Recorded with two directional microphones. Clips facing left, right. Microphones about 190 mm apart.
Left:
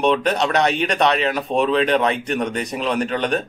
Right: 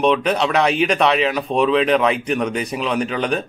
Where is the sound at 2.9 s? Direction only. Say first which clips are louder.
Left 1 dB; 35° left (ahead or behind).